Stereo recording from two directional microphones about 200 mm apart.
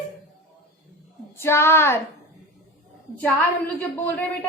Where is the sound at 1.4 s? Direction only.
10° left (ahead or behind).